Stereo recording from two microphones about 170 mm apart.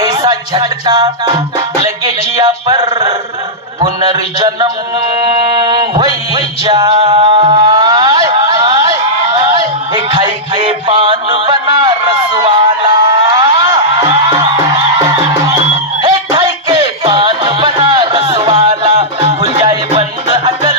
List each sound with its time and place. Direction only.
0.0 s music: 20° right (ahead or behind)
2.4 s a sound: 25° right (ahead or behind)
5.6 s music: 25° right (ahead or behind)
9.9 s music: 25° right (ahead or behind)